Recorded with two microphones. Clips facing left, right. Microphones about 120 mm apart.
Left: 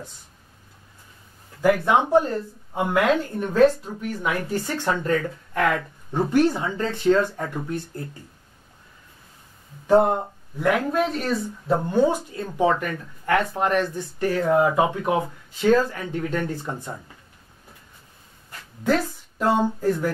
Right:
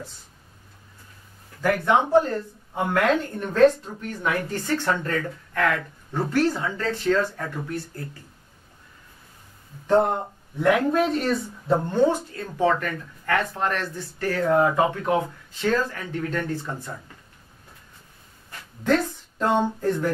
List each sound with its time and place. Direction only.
2.0 s speech: 15° left (ahead or behind)
9.8 s speech: 10° left (ahead or behind)
18.9 s speech: 5° left (ahead or behind)